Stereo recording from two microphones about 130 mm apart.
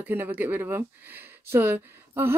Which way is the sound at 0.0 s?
15° right (ahead or behind).